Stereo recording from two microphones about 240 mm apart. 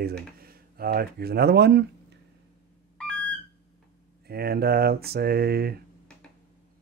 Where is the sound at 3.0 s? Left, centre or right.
Centre.